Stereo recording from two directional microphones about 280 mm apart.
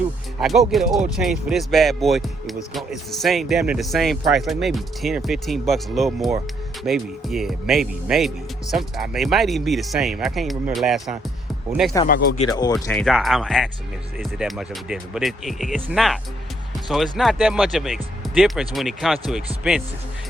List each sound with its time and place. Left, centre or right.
0.3 s speech: centre
12.0 s speech: left
12.5 s speech: centre
12.7 s speech: centre